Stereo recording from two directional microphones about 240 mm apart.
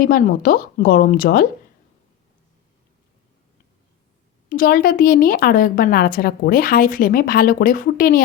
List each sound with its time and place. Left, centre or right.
0.0 s a woman's voice: left
4.4 s a woman's voice: left